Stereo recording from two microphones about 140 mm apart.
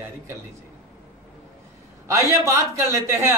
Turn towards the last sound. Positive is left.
turn(degrees=-20)  # may be behind; listen again after turning